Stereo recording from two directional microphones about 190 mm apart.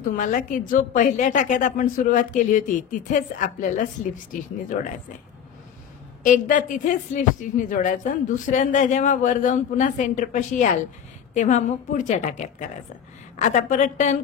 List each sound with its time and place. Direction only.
0.1 s a woman's voice: 45° left (ahead or behind)
6.2 s speech: 40° left (ahead or behind)